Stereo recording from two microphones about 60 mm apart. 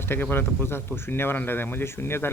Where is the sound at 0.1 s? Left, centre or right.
Left.